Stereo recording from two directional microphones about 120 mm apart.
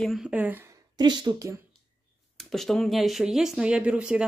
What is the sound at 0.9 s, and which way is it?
Speech, 35° right (ahead or behind).